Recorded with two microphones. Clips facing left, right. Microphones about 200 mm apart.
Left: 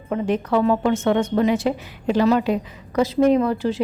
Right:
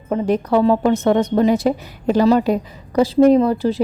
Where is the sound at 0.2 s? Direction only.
35° right (ahead or behind).